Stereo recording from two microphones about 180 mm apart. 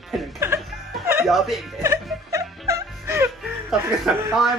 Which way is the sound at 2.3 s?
15° right (ahead or behind).